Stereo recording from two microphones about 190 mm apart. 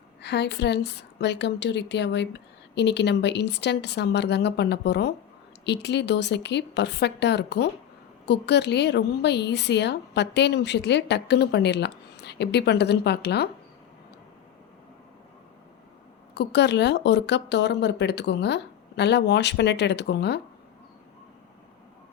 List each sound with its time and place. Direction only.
0.2 s a woman's voice: 65° left (ahead or behind)
16.3 s a woman's voice: 60° left (ahead or behind)